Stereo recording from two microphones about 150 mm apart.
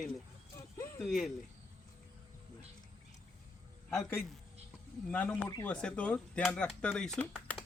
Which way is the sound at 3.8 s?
10° left (ahead or behind).